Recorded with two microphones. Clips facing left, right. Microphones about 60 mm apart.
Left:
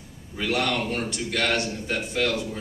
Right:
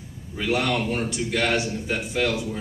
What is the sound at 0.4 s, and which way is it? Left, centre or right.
A man's voice, centre.